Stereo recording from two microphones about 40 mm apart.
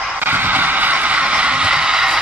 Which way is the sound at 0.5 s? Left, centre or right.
Right.